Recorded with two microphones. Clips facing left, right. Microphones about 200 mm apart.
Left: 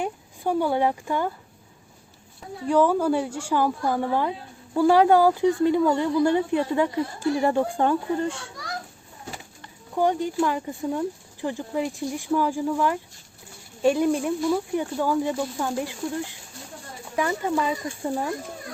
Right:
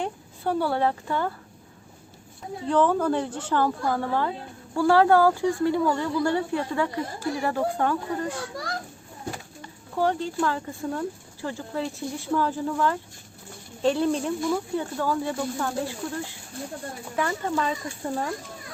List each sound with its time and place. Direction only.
0.0 s speech: 15° left (ahead or behind)
2.6 s speech: 10° left (ahead or behind); by 8.4 s 25° left (ahead or behind)
9.9 s speech: 15° left (ahead or behind)
17.2 s speech: 10° left (ahead or behind)